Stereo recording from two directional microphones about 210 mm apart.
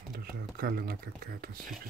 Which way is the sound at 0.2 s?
45° right (ahead or behind).